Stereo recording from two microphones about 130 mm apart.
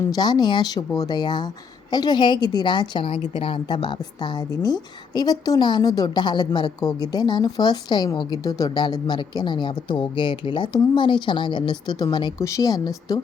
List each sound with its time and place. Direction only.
0.0 s a woman's voice: 30° left (ahead or behind)